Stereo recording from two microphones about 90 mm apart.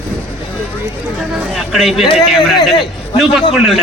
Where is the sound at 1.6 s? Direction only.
5° right (ahead or behind).